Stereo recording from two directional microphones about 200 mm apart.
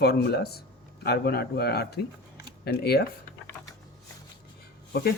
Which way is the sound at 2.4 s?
50° left (ahead or behind).